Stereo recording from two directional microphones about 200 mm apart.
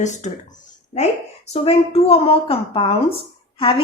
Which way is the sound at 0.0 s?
35° left (ahead or behind).